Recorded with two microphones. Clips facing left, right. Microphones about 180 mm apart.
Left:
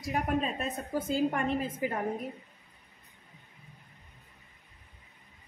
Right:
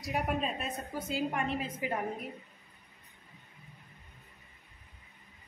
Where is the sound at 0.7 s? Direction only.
50° left (ahead or behind).